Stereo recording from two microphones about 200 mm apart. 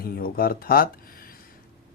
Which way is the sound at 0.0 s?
50° left (ahead or behind).